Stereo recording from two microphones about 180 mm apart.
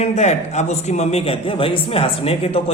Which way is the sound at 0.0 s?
40° left (ahead or behind).